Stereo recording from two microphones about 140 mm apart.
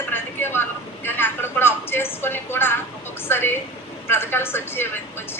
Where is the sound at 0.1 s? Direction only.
15° left (ahead or behind).